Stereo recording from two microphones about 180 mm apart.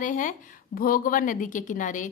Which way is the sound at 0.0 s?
45° left (ahead or behind).